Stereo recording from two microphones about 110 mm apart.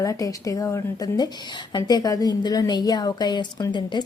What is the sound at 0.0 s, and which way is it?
A woman's voice, 30° left (ahead or behind).